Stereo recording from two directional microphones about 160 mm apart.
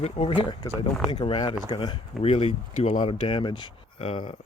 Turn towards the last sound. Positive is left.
turn(degrees=35)  # may be behind; listen again after turning